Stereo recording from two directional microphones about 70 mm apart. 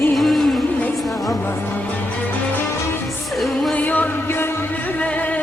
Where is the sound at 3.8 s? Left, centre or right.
Left.